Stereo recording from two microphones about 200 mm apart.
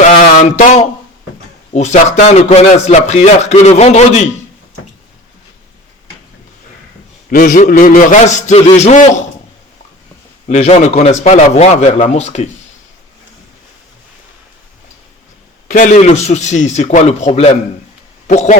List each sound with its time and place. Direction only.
0.0 s a sound: 35° left (ahead or behind)
1.7 s a man's voice: 35° left (ahead or behind)
7.3 s a man's voice: 45° left (ahead or behind)
10.5 s a man's voice: 35° left (ahead or behind)
15.6 s a man's voice: 40° left (ahead or behind)